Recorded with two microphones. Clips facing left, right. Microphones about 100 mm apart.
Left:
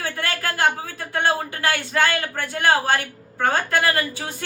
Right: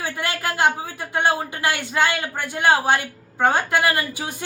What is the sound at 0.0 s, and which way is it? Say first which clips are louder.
Speech: right 1 dB; 20° right (ahead or behind).